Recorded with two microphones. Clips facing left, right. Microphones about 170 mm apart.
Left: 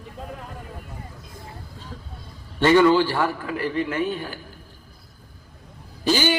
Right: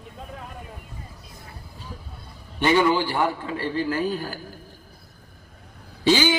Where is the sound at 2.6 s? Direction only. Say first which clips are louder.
Left 4 dB; 15° right (ahead or behind); by 4.4 s 40° right (ahead or behind).